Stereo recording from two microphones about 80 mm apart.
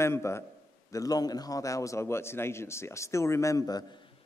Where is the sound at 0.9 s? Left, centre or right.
Left.